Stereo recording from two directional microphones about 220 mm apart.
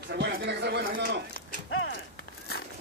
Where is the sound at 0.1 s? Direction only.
50° right (ahead or behind).